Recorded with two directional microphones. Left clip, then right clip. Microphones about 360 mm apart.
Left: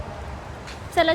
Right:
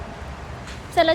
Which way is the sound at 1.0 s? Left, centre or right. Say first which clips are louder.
Right 2 dB; centre.